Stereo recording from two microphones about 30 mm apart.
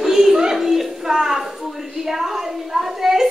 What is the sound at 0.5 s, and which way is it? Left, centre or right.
A child's voice, centre.